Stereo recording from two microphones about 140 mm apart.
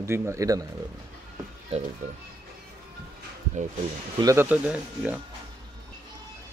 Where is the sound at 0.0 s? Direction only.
20° right (ahead or behind).